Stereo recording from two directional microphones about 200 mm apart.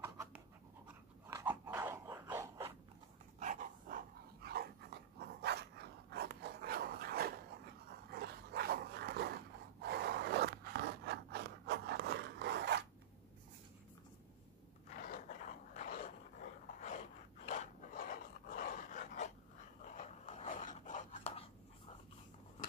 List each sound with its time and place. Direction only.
0.0 s dog: 15° right (ahead or behind)
3.3 s dog: 40° right (ahead or behind)
4.4 s dog: 50° right (ahead or behind)
15.0 s dog: 40° left (ahead or behind)
19.8 s a sound: 40° left (ahead or behind)